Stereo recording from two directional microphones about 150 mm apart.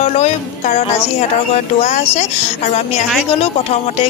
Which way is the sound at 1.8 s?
45° left (ahead or behind).